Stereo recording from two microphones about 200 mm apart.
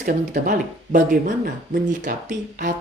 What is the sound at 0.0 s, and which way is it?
Speech, 40° right (ahead or behind).